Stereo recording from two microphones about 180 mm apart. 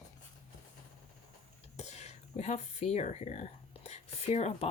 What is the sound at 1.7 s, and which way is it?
Speech, 35° left (ahead or behind).